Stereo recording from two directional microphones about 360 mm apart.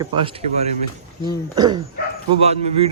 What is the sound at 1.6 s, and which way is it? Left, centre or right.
Speech, centre.